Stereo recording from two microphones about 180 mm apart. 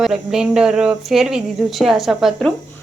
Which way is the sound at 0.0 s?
Centre (ahead or behind).